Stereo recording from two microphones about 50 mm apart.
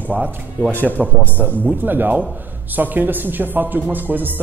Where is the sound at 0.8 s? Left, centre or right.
Left.